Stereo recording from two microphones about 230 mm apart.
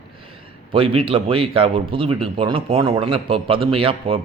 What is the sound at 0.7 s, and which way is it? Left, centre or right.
Speech, right.